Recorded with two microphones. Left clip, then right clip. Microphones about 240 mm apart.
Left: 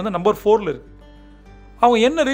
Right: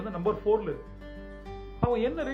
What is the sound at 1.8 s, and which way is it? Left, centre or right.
Speech, left.